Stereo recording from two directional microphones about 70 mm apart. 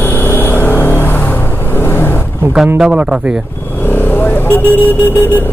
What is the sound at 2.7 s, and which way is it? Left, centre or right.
Speech, centre.